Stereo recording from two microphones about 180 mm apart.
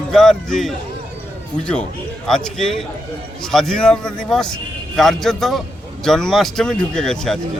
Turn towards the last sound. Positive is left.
turn(degrees=5)  # may be behind; listen again after turning